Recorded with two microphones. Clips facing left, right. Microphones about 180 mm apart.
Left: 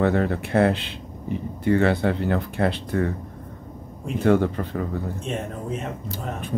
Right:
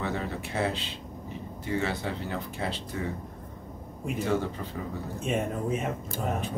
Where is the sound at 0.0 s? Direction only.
60° left (ahead or behind).